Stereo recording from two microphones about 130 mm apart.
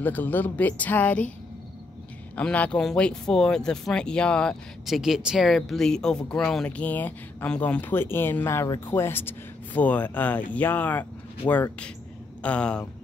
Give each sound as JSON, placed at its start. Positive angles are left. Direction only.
{"t": 0.0, "sound": "speech", "side_deg": 15}
{"t": 2.3, "sound": "speech", "side_deg": 10}